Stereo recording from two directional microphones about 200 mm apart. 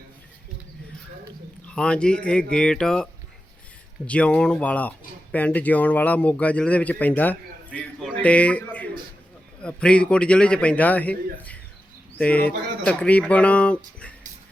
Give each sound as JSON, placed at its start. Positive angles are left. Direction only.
{"t": 1.6, "sound": "a man's voice", "side_deg": 5}